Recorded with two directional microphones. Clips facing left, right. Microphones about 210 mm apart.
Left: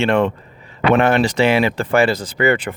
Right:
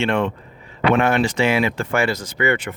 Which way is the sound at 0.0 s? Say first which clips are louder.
Left 4 dB; 40° left (ahead or behind).